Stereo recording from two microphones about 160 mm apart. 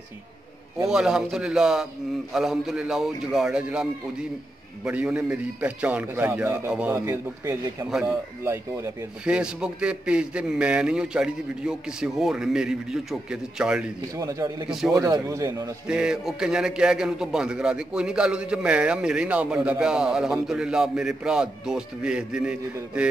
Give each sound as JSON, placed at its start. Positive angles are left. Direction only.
{"t": 0.8, "sound": "a man's voice", "side_deg": -5}
{"t": 7.1, "sound": "a man's voice", "side_deg": -20}
{"t": 9.2, "sound": "a man's voice", "side_deg": -5}
{"t": 14.1, "sound": "a man's voice", "side_deg": -20}
{"t": 14.7, "sound": "a man's voice", "side_deg": 0}
{"t": 15.0, "sound": "a man's voice", "side_deg": -20}
{"t": 15.9, "sound": "a man's voice", "side_deg": -5}